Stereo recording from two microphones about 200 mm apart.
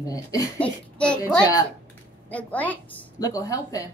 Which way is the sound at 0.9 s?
5° left (ahead or behind).